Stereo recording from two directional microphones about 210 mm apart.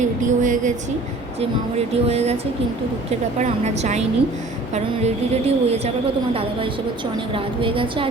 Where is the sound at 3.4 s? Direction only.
30° right (ahead or behind).